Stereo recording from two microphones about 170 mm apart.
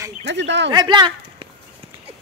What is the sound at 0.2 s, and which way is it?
Speech, 90° right.